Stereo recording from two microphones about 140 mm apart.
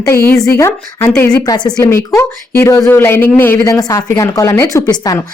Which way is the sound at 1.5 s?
30° left (ahead or behind).